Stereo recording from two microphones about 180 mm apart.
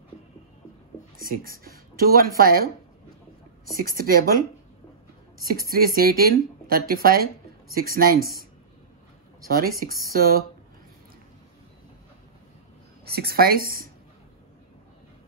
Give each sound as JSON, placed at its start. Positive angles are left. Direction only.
{"t": 1.1, "sound": "speech", "side_deg": -50}
{"t": 3.7, "sound": "speech", "side_deg": -55}
{"t": 5.4, "sound": "speech", "side_deg": -55}
{"t": 9.5, "sound": "speech", "side_deg": -55}
{"t": 13.0, "sound": "speech", "side_deg": -60}